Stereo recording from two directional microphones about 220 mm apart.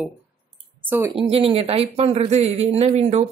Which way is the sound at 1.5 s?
25° right (ahead or behind).